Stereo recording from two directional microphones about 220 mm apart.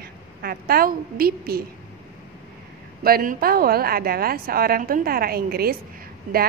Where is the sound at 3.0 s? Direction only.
40° right (ahead or behind).